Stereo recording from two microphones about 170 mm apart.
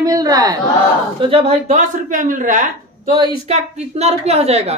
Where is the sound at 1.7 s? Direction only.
50° right (ahead or behind).